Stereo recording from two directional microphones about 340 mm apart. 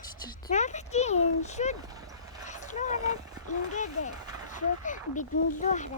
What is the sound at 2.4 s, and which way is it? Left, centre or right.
Vehicle, left.